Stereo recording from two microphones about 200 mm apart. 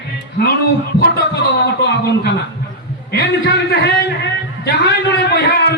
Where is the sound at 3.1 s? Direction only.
60° left (ahead or behind).